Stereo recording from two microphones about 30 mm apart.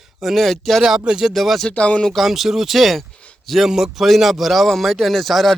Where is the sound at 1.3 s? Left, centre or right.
Centre.